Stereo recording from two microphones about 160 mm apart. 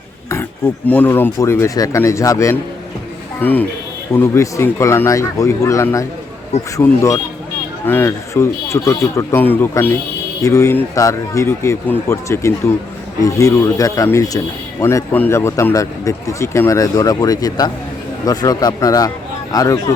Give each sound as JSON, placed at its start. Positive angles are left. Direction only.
{"t": 0.9, "sound": "speech", "side_deg": 10}